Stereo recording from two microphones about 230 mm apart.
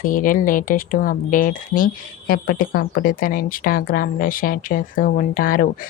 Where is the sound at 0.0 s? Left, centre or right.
Left.